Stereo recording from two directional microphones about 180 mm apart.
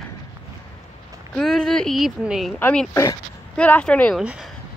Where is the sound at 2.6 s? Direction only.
10° left (ahead or behind).